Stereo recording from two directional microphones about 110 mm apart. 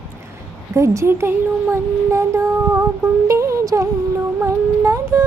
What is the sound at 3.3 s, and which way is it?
Music, 25° right (ahead or behind).